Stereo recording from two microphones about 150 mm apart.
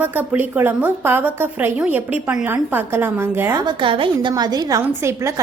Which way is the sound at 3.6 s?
35° right (ahead or behind).